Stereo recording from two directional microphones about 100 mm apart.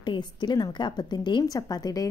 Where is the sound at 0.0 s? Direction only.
50° left (ahead or behind).